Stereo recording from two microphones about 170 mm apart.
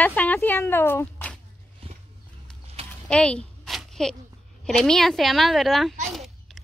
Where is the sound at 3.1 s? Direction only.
5° left (ahead or behind).